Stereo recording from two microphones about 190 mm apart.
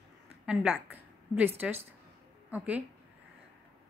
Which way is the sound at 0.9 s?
10° right (ahead or behind).